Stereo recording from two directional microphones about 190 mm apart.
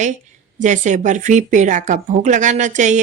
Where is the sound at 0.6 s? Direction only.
40° right (ahead or behind).